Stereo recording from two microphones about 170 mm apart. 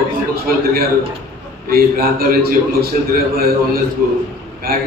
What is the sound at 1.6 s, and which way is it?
A man's voice, 60° right (ahead or behind).